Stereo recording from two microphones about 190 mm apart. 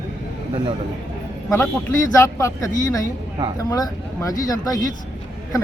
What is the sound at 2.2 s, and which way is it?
Speech, 15° left (ahead or behind).